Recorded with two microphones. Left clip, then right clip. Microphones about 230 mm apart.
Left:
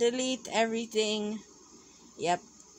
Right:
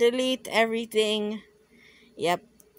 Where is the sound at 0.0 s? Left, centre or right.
Right.